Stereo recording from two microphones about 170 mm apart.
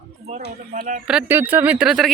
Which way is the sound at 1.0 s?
10° right (ahead or behind).